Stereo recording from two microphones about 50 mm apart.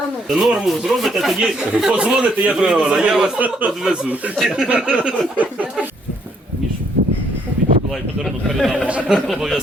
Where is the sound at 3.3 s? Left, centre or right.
Right.